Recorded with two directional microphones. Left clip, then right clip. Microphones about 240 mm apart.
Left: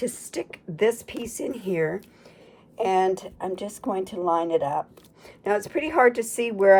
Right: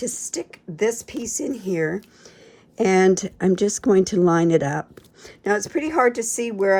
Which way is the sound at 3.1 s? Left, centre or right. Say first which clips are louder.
Right 8 dB; right.